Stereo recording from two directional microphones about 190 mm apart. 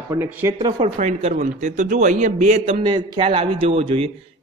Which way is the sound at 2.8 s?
25° right (ahead or behind).